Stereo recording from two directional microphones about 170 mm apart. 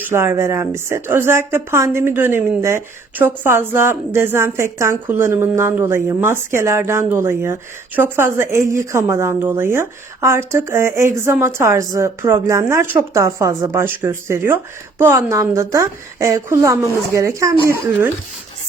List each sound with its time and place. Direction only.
0.0 s a woman's voice: 15° right (ahead or behind)